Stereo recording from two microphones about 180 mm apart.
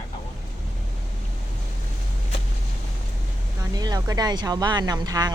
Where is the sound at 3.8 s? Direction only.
20° right (ahead or behind).